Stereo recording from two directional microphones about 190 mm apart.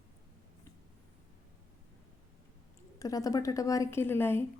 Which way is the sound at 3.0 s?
20° left (ahead or behind).